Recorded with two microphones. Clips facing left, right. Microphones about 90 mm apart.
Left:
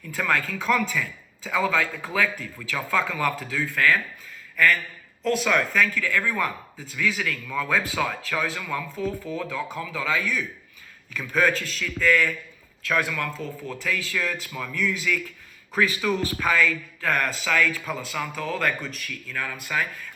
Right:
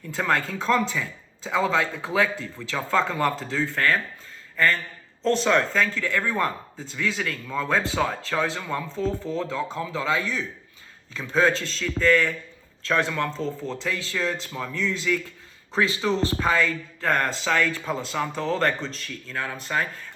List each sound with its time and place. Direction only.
0.1 s speech: 30° right (ahead or behind)